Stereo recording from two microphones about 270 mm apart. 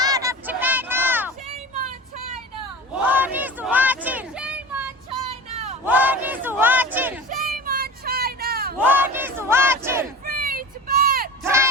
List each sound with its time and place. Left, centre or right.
0.0 s honk: centre
3.1 s a sound: centre
5.3 s a sound: right
5.8 s battle cry: centre
7.3 s child singing: right
8.8 s battle cry: centre
10.2 s vehicle: right
11.4 s battle cry: centre